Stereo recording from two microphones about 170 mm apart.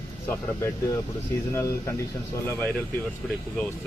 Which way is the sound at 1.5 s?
20° left (ahead or behind).